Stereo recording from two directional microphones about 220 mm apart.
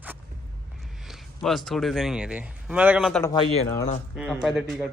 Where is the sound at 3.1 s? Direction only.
10° left (ahead or behind).